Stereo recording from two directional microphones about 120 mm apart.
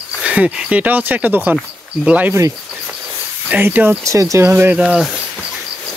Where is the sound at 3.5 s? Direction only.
15° right (ahead or behind).